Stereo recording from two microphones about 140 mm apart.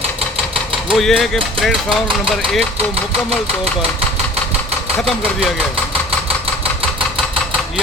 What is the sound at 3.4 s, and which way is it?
Engine, 45° right (ahead or behind).